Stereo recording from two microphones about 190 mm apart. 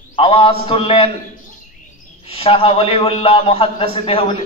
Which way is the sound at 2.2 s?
30° left (ahead or behind).